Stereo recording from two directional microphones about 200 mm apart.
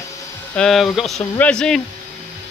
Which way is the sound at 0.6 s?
Centre (ahead or behind).